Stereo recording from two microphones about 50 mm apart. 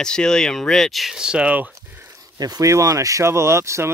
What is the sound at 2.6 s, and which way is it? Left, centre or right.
Speech, right.